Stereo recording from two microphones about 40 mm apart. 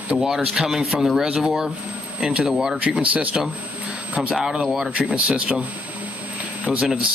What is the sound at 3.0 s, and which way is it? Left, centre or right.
Speech, right.